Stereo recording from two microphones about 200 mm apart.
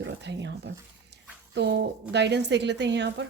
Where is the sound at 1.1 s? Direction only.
60° right (ahead or behind).